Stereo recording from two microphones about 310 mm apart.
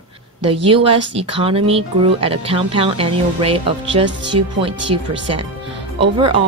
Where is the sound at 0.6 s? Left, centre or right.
Centre.